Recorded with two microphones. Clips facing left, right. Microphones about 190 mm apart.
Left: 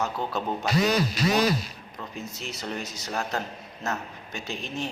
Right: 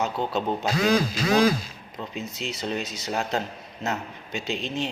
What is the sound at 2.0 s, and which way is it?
A man's voice, 20° right (ahead or behind).